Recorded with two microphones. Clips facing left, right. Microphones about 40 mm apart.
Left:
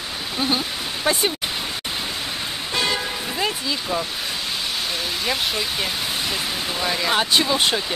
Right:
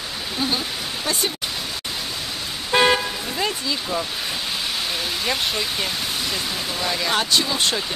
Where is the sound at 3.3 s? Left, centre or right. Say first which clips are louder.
Even; centre.